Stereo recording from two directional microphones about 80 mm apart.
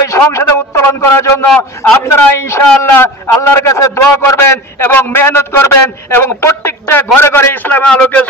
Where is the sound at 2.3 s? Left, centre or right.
Left.